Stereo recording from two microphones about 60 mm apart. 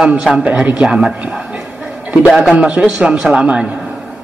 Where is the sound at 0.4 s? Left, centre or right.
Centre.